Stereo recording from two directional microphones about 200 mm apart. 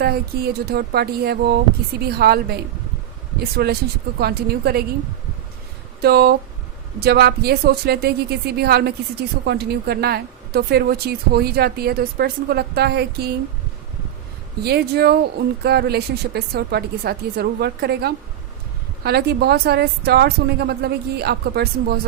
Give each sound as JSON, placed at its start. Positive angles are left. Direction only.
{"t": 0.0, "sound": "a woman's voice", "side_deg": -50}
{"t": 6.0, "sound": "a woman's voice", "side_deg": -55}
{"t": 14.6, "sound": "a woman's voice", "side_deg": -55}